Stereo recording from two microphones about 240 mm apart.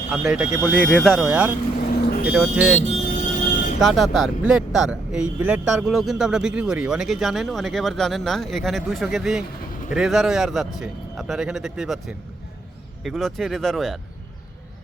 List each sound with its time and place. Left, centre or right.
0.1 s speech: centre
1.9 s vehicle: left
2.2 s speech: centre
2.8 s music: left
3.8 s speech: centre